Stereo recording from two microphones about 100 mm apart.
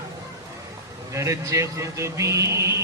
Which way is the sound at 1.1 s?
30° right (ahead or behind).